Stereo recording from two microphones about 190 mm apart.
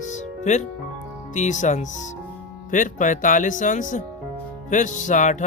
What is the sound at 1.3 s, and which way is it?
Music, 40° left (ahead or behind).